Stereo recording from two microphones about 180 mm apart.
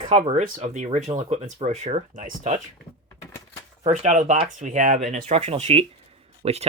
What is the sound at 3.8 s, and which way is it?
Speech, 40° right (ahead or behind).